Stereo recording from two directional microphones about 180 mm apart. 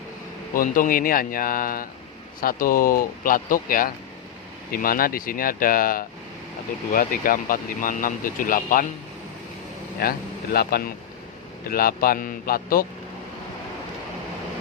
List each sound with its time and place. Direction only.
0.5 s speech: 50° left (ahead or behind)
10.0 s speech: 60° left (ahead or behind)